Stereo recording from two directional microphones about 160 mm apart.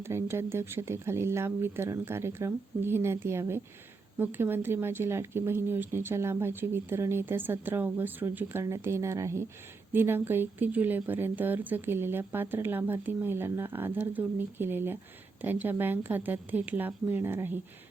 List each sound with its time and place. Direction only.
0.0 s speech: 15° right (ahead or behind)